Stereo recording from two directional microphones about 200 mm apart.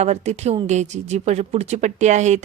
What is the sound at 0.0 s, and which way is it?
Speech, 35° right (ahead or behind).